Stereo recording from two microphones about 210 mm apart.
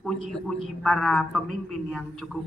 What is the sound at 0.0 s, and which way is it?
A man's voice, centre (ahead or behind).